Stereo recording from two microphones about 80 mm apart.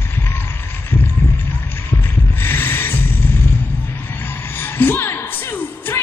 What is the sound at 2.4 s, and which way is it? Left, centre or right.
Music, left.